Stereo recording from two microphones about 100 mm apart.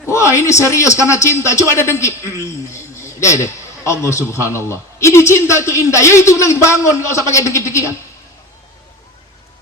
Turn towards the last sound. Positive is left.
turn(degrees=30)  # may be behind; listen again after turning